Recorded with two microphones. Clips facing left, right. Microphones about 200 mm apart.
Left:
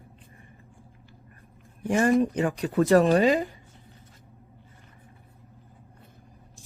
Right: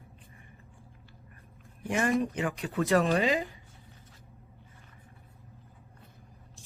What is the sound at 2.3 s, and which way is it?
Speech, 35° left (ahead or behind).